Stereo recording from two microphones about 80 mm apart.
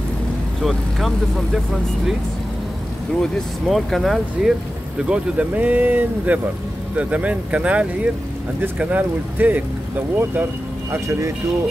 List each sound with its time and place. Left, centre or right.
0.6 s speech: centre
3.2 s speech: centre
5.0 s speech: centre
10.9 s speech: right